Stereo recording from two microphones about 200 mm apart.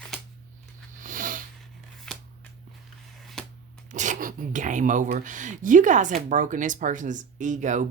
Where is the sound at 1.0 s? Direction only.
40° right (ahead or behind).